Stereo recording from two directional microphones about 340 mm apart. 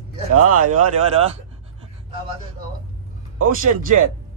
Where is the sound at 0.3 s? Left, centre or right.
Right.